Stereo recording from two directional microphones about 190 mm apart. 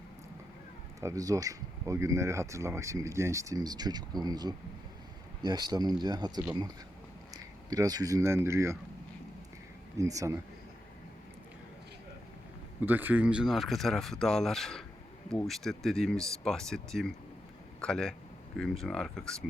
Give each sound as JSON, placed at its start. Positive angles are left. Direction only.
{"t": 1.0, "sound": "speech", "side_deg": -20}
{"t": 10.0, "sound": "speech", "side_deg": -15}
{"t": 12.8, "sound": "speech", "side_deg": -10}